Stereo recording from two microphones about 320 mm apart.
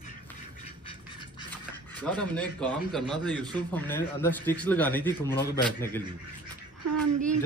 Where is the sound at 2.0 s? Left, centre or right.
Centre.